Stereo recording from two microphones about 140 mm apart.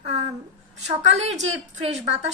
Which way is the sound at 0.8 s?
50° right (ahead or behind).